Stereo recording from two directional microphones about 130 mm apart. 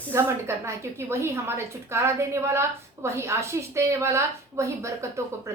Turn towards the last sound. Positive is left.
turn(degrees=-20)  # may be behind; listen again after turning